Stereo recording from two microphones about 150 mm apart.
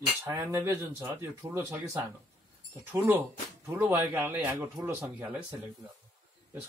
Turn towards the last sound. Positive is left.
turn(degrees=-15)  # may be behind; listen again after turning